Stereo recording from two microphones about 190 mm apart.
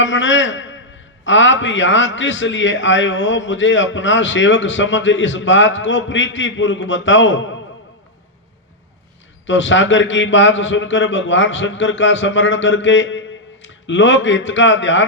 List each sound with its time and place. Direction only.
0.0 s a man's voice: 75° left (ahead or behind)
9.5 s a man's voice: 75° left (ahead or behind)